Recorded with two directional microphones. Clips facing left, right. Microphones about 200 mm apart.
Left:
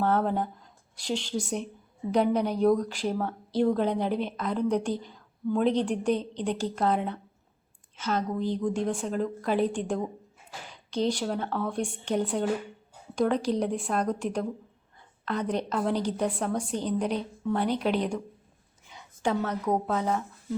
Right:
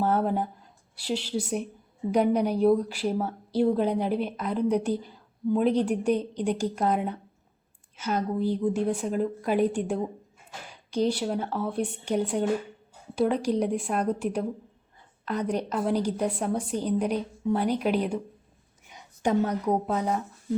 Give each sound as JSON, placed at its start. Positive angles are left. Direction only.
{"t": 0.0, "sound": "a woman's voice", "side_deg": -10}